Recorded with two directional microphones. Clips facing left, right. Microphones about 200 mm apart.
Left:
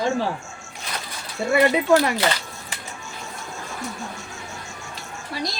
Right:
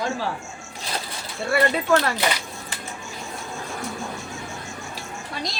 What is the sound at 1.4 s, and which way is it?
Speech, 15° left (ahead or behind).